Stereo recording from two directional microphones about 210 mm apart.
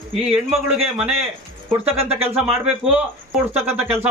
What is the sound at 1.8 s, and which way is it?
Speech, 30° right (ahead or behind).